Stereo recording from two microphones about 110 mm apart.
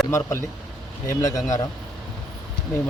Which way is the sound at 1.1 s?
30° left (ahead or behind).